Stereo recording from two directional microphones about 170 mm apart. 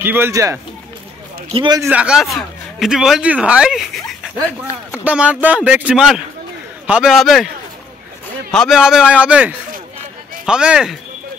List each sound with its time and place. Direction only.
0.0 s speech: 10° right (ahead or behind)
1.5 s a man's voice: 30° right (ahead or behind)
1.8 s a man's voice: 10° right (ahead or behind)
8.5 s a man's voice: centre (ahead or behind)